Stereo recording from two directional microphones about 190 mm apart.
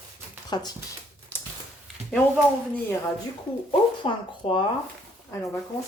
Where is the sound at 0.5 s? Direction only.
20° left (ahead or behind).